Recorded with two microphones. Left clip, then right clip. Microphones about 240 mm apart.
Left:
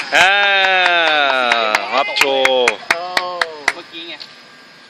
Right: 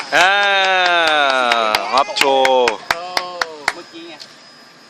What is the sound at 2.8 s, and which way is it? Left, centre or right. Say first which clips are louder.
Chop: left 3 dB; left.